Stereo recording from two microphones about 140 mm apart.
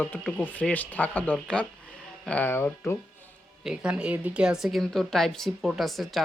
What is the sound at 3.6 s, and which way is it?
Speech, 5° right (ahead or behind).